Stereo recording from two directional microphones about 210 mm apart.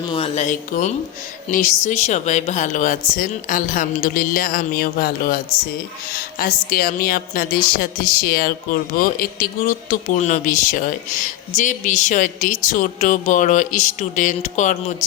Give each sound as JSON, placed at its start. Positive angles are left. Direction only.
{"t": 0.1, "sound": "a woman's voice", "side_deg": 30}